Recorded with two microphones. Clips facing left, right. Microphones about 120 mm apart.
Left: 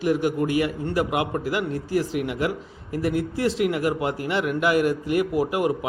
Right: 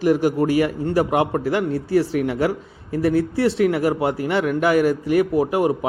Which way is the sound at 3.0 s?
35° right (ahead or behind).